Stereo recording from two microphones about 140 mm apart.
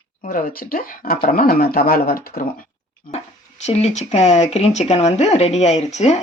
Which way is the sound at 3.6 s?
50° left (ahead or behind).